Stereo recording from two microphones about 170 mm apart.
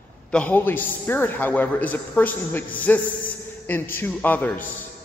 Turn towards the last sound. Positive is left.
turn(degrees=10)  # may be behind; listen again after turning